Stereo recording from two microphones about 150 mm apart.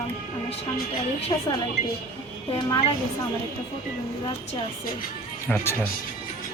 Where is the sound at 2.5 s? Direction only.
35° left (ahead or behind).